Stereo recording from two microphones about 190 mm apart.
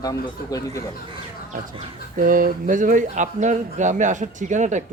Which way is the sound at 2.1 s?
45° right (ahead or behind).